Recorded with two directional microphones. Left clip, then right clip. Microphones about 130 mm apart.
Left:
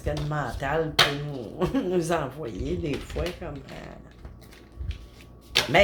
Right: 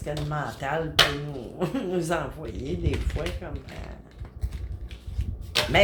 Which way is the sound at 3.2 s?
90° left.